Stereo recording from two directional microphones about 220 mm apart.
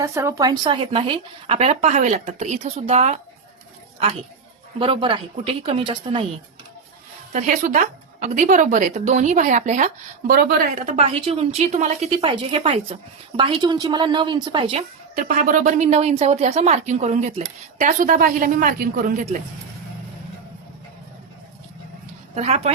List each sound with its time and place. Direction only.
0.0 s a woman's voice: 15° right (ahead or behind); by 3.2 s 30° right (ahead or behind)
4.8 s a woman's voice: 25° right (ahead or behind)
7.3 s a woman's voice: 35° right (ahead or behind)
22.4 s a woman's voice: 30° right (ahead or behind)